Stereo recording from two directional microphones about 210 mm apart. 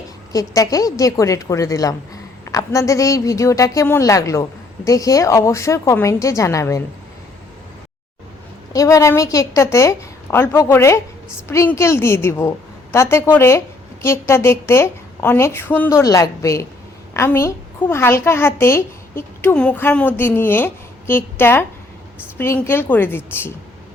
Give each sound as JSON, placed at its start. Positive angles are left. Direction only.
{"t": 0.3, "sound": "a child's voice", "side_deg": 15}
{"t": 8.7, "sound": "a child's voice", "side_deg": 15}